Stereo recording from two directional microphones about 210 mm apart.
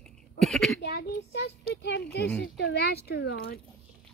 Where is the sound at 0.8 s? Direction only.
55° left (ahead or behind).